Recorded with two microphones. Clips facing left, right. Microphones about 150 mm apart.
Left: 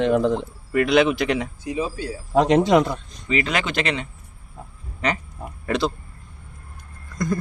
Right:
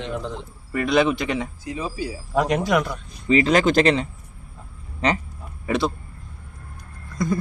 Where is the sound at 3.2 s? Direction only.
35° right (ahead or behind).